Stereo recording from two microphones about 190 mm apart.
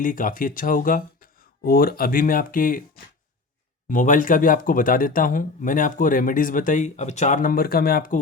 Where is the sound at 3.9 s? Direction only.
45° left (ahead or behind).